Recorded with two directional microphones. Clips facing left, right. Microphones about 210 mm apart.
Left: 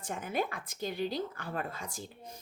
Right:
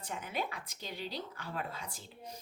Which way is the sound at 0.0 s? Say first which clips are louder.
Left 5 dB; 50° left (ahead or behind).